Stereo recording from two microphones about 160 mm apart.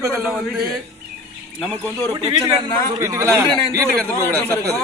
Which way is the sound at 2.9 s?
20° right (ahead or behind).